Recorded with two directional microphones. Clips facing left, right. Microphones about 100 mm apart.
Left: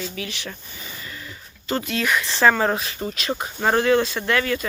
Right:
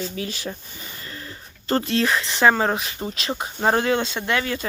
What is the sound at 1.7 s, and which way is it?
Speech, 35° right (ahead or behind).